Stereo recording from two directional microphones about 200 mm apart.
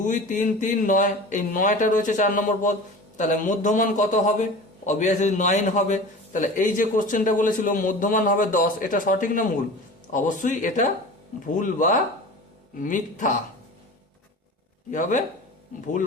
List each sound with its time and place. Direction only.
0.0 s a man's voice: 40° left (ahead or behind)
14.8 s a man's voice: 40° left (ahead or behind)